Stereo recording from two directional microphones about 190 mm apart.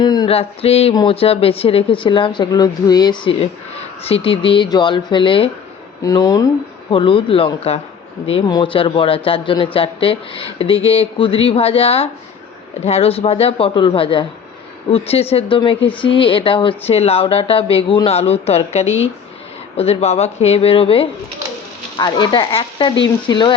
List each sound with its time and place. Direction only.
0.0 s speech: 20° left (ahead or behind)